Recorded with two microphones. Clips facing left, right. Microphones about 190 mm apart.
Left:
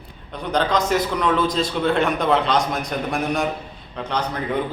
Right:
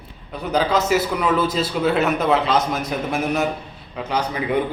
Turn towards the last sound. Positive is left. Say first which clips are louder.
# right 2 dB
turn(degrees=-10)  # may be behind; listen again after turning